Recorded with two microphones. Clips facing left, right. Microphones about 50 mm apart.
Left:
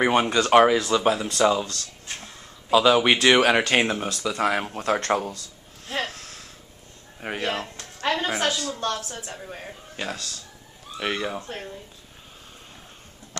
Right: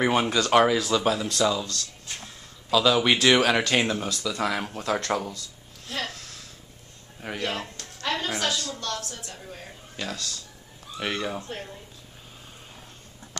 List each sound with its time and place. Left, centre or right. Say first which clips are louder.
0.0 s speech: left 2 dB; centre
5.9 s a sound: left 3 dB; left
7.2 s speech: left 3 dB; left